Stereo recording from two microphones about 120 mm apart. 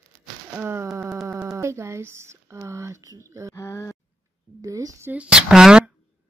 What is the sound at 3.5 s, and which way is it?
Speech, 25° left (ahead or behind).